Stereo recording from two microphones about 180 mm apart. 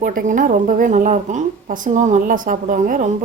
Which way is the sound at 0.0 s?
45° right (ahead or behind).